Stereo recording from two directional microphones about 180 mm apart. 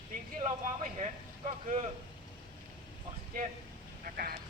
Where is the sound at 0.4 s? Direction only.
45° right (ahead or behind).